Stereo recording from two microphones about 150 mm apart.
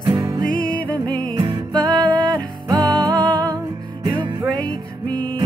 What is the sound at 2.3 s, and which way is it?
Music, 25° right (ahead or behind).